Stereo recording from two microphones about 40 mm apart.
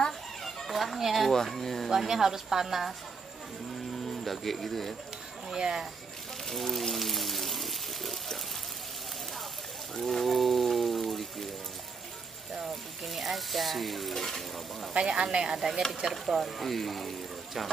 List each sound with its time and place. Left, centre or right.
0.4 s children playing: centre
0.7 s a sound: centre
1.3 s speech: centre
1.9 s a woman's voice: centre
3.9 s speech: centre
5.5 s a woman's voice: centre
6.4 s a sound: centre
9.9 s a sound: centre
13.0 s stir: centre
15.0 s a woman's voice: right
16.1 s stir: centre